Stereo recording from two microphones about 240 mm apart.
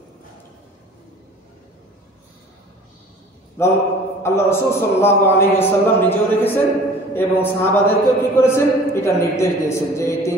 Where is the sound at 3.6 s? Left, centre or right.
Centre.